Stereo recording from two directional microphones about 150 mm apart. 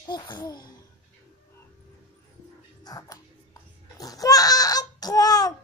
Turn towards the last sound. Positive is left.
turn(degrees=25)  # may be behind; listen again after turning